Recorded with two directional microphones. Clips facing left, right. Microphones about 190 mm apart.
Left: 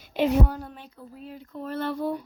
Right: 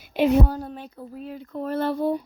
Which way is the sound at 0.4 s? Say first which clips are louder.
Right 4 dB; 35° right (ahead or behind).